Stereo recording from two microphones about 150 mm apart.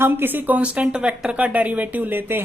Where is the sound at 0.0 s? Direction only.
15° right (ahead or behind).